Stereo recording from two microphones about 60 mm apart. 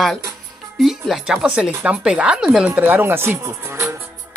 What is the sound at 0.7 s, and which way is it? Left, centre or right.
Speech, centre.